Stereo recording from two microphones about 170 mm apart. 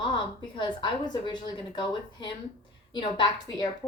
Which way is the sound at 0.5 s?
30° left (ahead or behind).